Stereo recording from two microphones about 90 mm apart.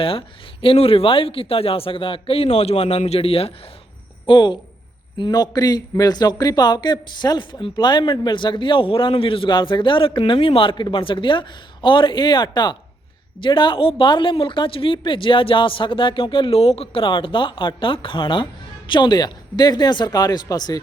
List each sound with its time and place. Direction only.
0.0 s speech: 85° left
4.3 s speech: 60° left (ahead or behind); by 10.8 s 75° left (ahead or behind)
10.8 s speech: 65° left (ahead or behind); by 20.7 s 50° left (ahead or behind)